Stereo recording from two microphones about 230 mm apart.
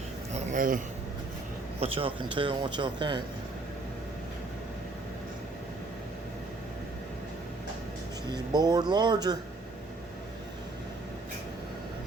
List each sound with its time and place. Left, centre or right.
0.3 s a sound: right
1.8 s speech: right
8.3 s speech: centre